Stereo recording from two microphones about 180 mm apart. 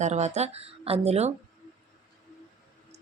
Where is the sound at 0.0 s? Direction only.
40° right (ahead or behind).